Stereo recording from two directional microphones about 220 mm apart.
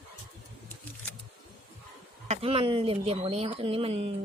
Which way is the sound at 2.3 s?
25° right (ahead or behind).